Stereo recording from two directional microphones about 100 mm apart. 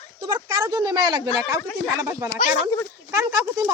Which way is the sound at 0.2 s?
40° right (ahead or behind).